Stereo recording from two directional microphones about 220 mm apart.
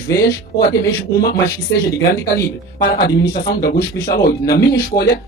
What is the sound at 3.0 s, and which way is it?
Speech, 45° left (ahead or behind).